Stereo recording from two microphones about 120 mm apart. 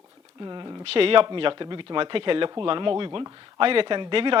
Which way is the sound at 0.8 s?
50° right (ahead or behind).